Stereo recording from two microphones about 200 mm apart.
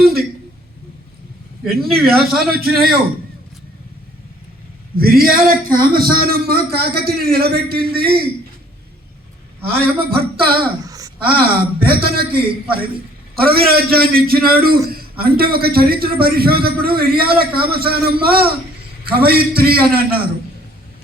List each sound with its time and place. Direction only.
0.0 s a sound: 50° right (ahead or behind)
2.0 s a man's voice: 50° right (ahead or behind)
4.9 s a man's voice: 50° right (ahead or behind)
9.6 s a man's voice: 50° right (ahead or behind)
10.8 s a sound: 15° right (ahead or behind)
11.2 s a man's voice: 50° right (ahead or behind)